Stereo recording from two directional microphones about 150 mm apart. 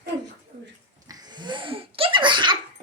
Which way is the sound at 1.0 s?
25° right (ahead or behind).